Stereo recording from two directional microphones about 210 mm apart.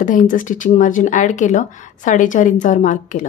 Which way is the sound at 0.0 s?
40° left (ahead or behind).